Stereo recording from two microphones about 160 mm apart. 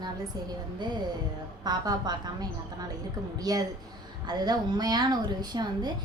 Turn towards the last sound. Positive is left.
turn(degrees=-25)  # may be behind; listen again after turning